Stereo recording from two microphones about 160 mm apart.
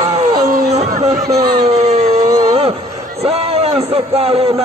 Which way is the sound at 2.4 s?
35° right (ahead or behind).